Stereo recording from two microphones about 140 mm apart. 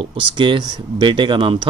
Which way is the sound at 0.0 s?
40° right (ahead or behind).